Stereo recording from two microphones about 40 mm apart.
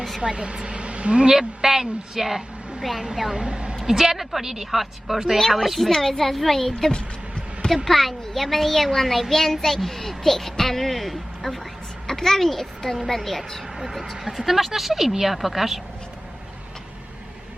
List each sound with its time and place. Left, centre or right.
0.3 s a woman's voice: right
3.8 s a woman's voice: centre
5.4 s a woman's voice: centre
6.9 s a sound: left
7.9 s a child's voice: centre
13.7 s a child's voice: centre